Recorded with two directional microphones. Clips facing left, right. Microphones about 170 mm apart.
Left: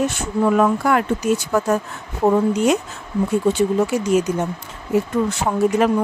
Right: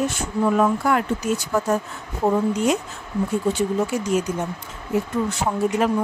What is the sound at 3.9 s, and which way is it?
Speech, 75° left (ahead or behind).